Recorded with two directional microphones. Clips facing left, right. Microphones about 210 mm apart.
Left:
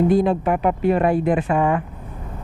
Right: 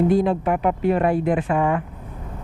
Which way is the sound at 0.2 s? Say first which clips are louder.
Left 1 dB; 15° left (ahead or behind).